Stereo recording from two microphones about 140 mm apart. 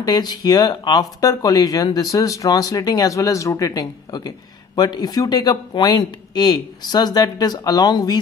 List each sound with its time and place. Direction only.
0.0 s speech: 30° left (ahead or behind)